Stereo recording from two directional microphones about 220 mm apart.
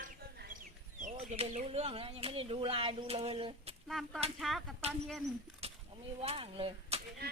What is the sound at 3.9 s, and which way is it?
Speech, centre (ahead or behind).